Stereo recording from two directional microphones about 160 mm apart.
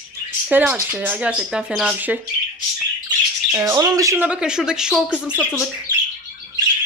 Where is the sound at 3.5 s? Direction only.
20° right (ahead or behind); by 5.0 s 5° right (ahead or behind).